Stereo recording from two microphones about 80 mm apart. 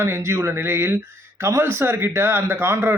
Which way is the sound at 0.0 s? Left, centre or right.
Right.